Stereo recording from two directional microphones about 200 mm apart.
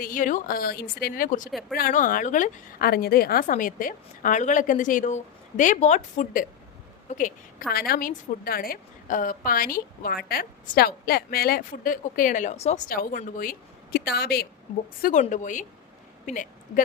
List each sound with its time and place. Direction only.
0.0 s a woman's voice: 40° left (ahead or behind)
15.0 s a woman's voice: 40° left (ahead or behind)